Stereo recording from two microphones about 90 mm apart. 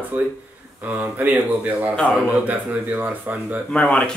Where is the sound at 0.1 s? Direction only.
20° right (ahead or behind).